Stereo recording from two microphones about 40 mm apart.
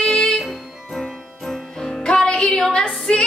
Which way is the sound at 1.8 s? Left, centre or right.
Centre.